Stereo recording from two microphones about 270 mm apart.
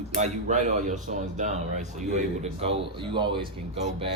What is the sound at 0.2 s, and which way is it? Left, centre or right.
Speech, right.